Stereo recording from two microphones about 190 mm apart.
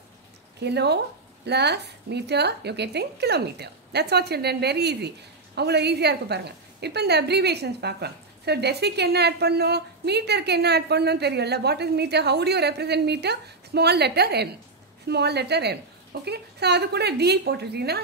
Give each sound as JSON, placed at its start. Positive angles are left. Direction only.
{"t": 0.6, "sound": "speech", "side_deg": -60}